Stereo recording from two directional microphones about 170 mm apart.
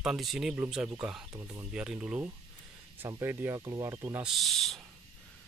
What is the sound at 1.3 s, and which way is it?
Speech, 15° right (ahead or behind).